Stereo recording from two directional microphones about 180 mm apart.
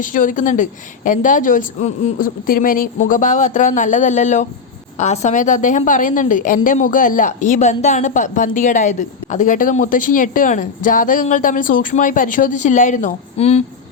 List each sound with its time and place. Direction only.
0.0 s a woman's voice: 45° left (ahead or behind)